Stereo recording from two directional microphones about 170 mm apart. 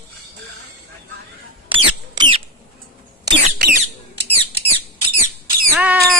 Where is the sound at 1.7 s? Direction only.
30° right (ahead or behind).